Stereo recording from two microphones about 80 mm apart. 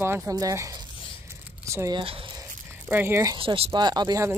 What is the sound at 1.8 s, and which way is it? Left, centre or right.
Speech, right.